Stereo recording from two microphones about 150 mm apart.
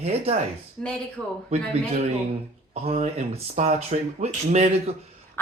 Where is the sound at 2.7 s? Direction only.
40° right (ahead or behind).